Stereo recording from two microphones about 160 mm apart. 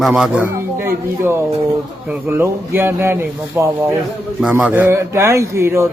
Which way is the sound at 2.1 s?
15° right (ahead or behind).